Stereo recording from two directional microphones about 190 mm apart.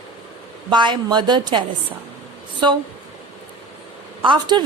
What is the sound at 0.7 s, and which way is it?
Speech, 25° right (ahead or behind).